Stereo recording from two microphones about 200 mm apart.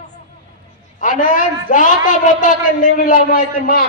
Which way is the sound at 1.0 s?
40° left (ahead or behind).